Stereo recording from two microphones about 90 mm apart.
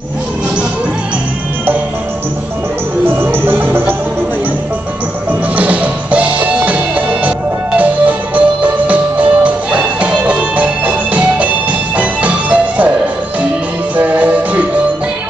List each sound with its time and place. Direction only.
3.2 s music: 25° right (ahead or behind)
5.6 s music: 15° right (ahead or behind)
13.9 s music: 15° right (ahead or behind)